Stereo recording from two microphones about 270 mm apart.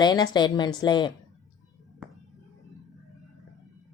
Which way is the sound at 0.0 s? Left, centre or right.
Centre.